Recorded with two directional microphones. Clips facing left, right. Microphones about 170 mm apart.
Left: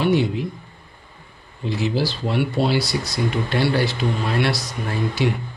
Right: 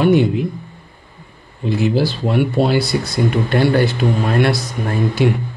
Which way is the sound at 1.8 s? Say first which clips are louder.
Right 5 dB; 55° right (ahead or behind).